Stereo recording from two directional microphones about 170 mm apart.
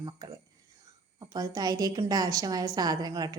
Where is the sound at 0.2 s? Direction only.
20° right (ahead or behind).